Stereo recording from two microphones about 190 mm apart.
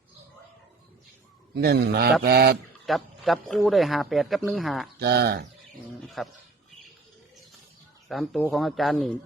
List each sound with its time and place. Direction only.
1.5 s speech: 60° right (ahead or behind)
2.8 s a man's voice: centre (ahead or behind)
4.9 s speech: 60° right (ahead or behind)
6.0 s speech: centre (ahead or behind)
8.0 s a man's voice: centre (ahead or behind)